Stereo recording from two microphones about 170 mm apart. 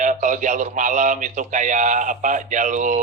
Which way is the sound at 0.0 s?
45° right (ahead or behind).